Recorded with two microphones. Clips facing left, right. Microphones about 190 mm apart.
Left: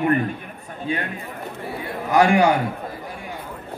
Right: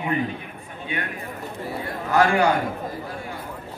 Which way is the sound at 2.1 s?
15° left (ahead or behind).